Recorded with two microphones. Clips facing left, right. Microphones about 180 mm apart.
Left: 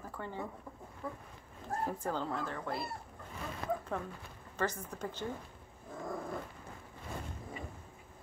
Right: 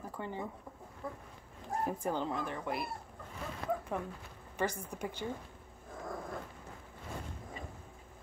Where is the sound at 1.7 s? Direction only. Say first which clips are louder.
Right 1 dB; 15° right (ahead or behind).